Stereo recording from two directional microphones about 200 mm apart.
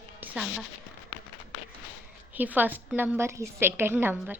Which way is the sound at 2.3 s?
10° right (ahead or behind).